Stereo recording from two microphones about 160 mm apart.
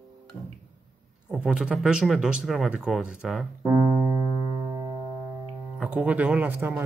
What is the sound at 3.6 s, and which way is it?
Piano, 20° right (ahead or behind).